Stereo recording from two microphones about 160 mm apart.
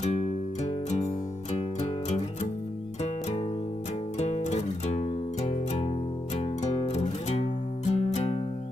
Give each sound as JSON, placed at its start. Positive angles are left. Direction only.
{"t": 0.0, "sound": "music", "side_deg": 40}
{"t": 4.2, "sound": "music", "side_deg": 45}